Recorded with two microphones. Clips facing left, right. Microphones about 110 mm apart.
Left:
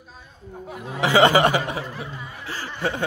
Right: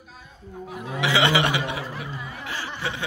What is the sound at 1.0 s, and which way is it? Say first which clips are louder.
Speech: left 5 dB; 45° left (ahead or behind).